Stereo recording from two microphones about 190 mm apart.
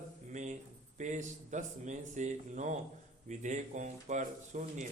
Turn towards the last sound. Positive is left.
turn(degrees=-40)  # may be behind; listen again after turning